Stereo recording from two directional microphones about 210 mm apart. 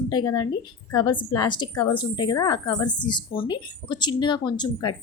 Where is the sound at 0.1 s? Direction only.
20° left (ahead or behind).